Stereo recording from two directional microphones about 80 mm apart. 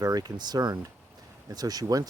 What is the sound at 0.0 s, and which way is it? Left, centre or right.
Speech, right.